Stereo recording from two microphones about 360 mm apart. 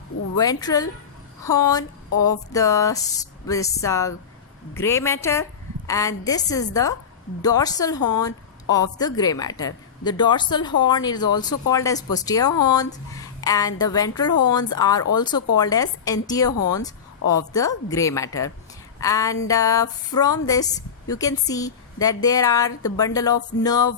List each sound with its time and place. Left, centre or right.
0.3 s a woman's voice: centre
2.1 s speech: left
2.5 s a woman's voice: centre
16.5 s speech: left
17.3 s a woman's voice: centre